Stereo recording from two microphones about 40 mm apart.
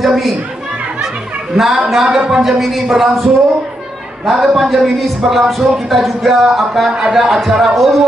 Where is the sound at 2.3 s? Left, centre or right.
Centre.